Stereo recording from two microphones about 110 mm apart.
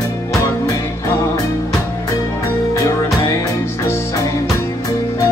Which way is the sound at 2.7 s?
30° left (ahead or behind).